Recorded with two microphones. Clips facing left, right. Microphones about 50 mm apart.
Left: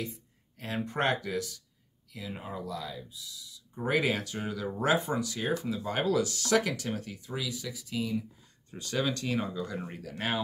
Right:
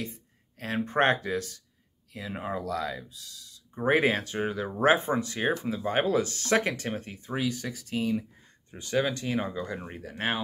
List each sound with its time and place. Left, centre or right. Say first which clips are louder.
0.0 s speech: right 1 dB; right
3.7 s speech: right 4 dB; right
8.7 s speech: right 4 dB; right